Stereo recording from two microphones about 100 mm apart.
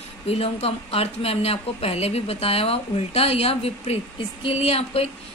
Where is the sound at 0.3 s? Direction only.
85° left.